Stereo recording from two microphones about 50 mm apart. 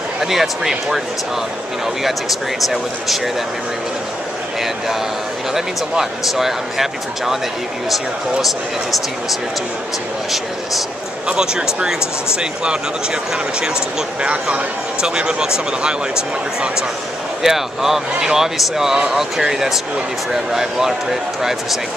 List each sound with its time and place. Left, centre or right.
0.2 s speech: centre
2.0 s speech: centre
5.5 s speech: centre
11.2 s speech: centre
17.4 s speech: centre